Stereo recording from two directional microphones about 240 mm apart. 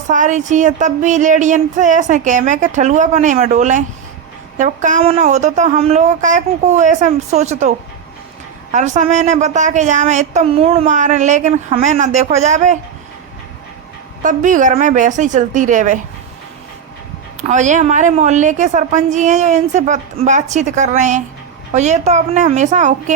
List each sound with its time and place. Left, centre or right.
0.1 s a woman's voice: right
8.7 s speech: right
14.2 s a woman's voice: right
17.4 s a woman's voice: right